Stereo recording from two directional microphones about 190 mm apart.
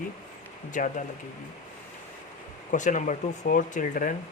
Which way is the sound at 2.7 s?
40° left (ahead or behind).